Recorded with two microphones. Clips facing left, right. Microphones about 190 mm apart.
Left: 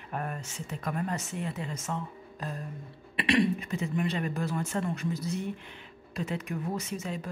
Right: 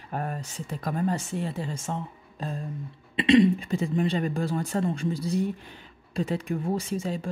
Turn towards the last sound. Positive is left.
turn(degrees=-30)  # may be behind; listen again after turning